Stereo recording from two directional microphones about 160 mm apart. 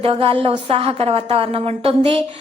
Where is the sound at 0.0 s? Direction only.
35° right (ahead or behind).